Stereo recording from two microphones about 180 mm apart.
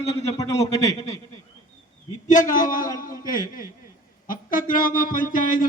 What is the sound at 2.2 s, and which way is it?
Speech, 45° left (ahead or behind).